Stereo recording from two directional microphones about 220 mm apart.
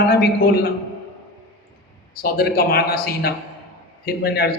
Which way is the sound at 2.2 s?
40° left (ahead or behind).